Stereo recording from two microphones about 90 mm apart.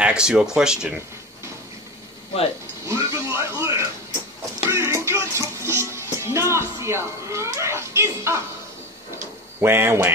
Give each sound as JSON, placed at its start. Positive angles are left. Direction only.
{"t": 0.0, "sound": "speech", "side_deg": -10}
{"t": 2.8, "sound": "television", "side_deg": -35}
{"t": 4.6, "sound": "music", "side_deg": -30}
{"t": 9.6, "sound": "speech", "side_deg": -30}